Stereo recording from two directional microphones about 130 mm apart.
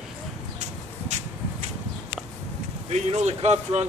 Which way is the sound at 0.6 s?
65° right (ahead or behind).